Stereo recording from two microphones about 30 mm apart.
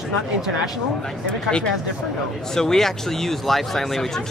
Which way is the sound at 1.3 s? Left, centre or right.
Left.